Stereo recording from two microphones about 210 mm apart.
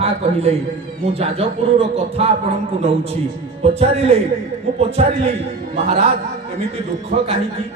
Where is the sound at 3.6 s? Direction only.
30° right (ahead or behind).